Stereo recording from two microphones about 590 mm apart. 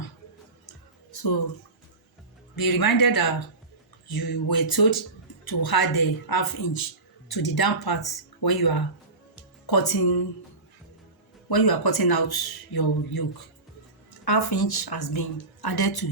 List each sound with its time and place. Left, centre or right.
2.6 s speech: left
11.4 s speech: left
14.3 s speech: left